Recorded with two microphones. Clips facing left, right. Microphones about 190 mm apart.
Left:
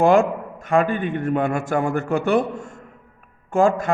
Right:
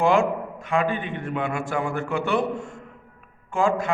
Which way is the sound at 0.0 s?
45° left (ahead or behind).